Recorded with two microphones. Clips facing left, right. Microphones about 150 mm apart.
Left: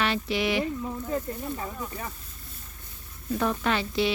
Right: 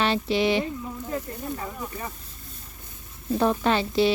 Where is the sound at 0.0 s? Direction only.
30° right (ahead or behind).